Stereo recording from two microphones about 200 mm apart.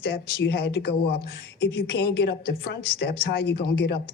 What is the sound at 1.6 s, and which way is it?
A woman's voice, 65° left (ahead or behind).